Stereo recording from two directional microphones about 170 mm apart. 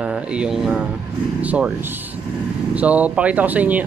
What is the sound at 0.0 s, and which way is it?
Speech, 5° right (ahead or behind).